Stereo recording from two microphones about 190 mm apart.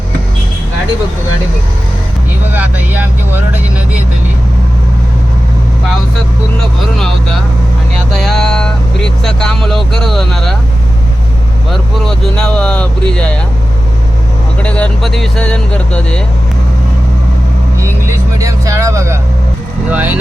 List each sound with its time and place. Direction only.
2.5 s vehicle: 10° right (ahead or behind)
6.9 s speech: centre (ahead or behind)
8.1 s vehicle: centre (ahead or behind)
9.2 s speech: 5° left (ahead or behind)
11.7 s speech: centre (ahead or behind)
14.6 s speech: 5° left (ahead or behind)
17.7 s vehicle: 15° right (ahead or behind)
19.9 s speech: 10° right (ahead or behind)